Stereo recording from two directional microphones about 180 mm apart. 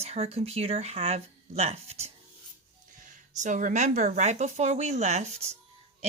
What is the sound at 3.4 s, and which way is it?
A woman's voice, 45° right (ahead or behind).